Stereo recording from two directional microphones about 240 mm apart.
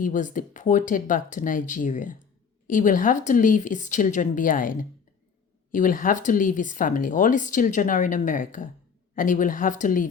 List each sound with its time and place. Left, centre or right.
0.0 s speech: left